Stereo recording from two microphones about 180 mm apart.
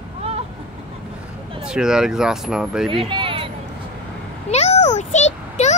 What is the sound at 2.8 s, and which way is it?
Speech, 30° right (ahead or behind).